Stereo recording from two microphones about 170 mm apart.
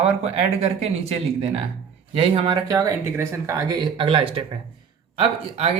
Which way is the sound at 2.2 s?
35° right (ahead or behind).